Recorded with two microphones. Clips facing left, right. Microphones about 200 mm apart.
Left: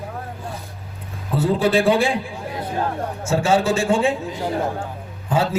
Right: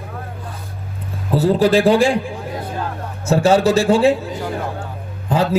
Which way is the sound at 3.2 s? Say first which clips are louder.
Right 5 dB; 35° right (ahead or behind).